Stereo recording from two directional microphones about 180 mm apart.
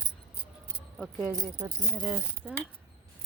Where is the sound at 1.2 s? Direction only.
20° right (ahead or behind).